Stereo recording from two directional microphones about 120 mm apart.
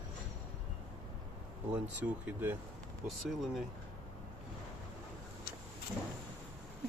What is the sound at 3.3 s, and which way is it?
Speech, centre (ahead or behind).